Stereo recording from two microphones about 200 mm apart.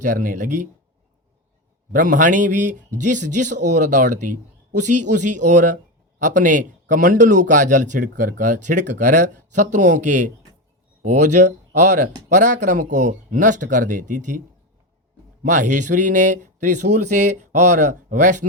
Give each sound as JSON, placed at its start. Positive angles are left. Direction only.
{"t": 0.0, "sound": "speech", "side_deg": -40}
{"t": 1.9, "sound": "speech", "side_deg": -40}
{"t": 15.4, "sound": "speech", "side_deg": -40}